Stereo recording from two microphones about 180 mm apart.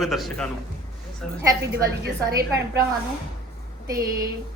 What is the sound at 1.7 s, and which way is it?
A woman's voice, 60° right (ahead or behind).